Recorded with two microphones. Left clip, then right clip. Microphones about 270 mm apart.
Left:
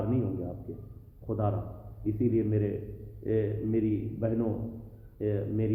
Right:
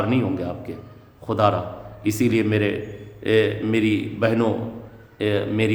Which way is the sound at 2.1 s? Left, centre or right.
Right.